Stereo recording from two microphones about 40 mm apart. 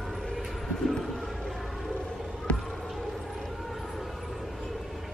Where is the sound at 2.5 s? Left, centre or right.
Left.